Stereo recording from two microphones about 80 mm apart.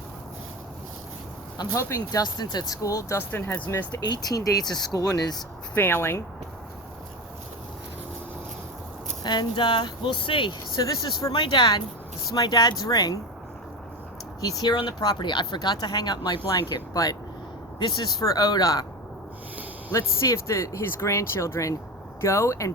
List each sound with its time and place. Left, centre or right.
1.5 s speech: left
2.2 s speech: left
3.3 s speech: left
4.1 s speech: left
5.7 s speech: left
9.2 s speech: left
10.8 s speech: left
11.3 s speech: left
12.3 s speech: left
14.4 s speech: left
16.5 s speech: left
17.7 s speech: left
19.9 s speech: left